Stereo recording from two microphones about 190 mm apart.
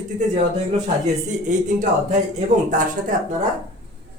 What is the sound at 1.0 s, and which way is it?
Speech, 40° right (ahead or behind).